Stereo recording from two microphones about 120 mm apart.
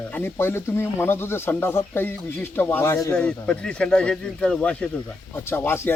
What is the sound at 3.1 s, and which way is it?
Speech, 10° left (ahead or behind).